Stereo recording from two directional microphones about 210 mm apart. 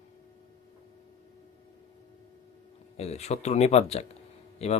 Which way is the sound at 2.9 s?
30° left (ahead or behind).